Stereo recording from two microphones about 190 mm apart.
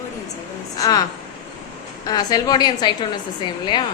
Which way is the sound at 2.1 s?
20° left (ahead or behind).